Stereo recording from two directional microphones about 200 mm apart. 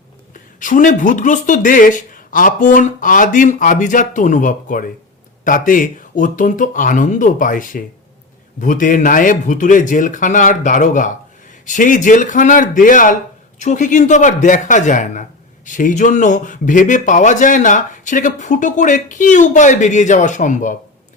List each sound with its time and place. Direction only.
0.3 s speech: 40° left (ahead or behind)